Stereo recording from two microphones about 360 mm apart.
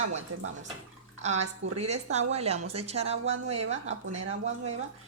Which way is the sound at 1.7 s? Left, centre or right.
Centre.